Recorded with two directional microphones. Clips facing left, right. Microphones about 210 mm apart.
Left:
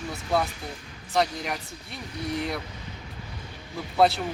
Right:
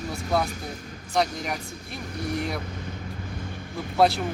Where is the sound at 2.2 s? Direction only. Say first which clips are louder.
Right 1 dB; 50° right (ahead or behind).